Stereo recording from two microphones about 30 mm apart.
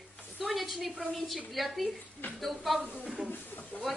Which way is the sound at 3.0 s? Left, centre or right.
Right.